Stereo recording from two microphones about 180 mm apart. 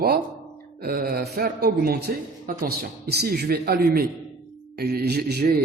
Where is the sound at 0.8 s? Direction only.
55° right (ahead or behind).